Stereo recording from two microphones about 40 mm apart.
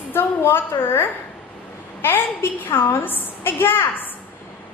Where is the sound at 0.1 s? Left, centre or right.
Left.